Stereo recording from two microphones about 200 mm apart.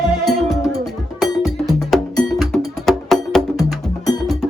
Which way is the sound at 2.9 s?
Centre (ahead or behind).